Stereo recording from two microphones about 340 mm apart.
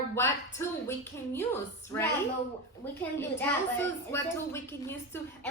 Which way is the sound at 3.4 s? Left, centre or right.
Centre.